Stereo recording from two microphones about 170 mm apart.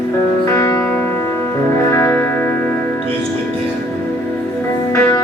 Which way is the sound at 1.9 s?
15° left (ahead or behind).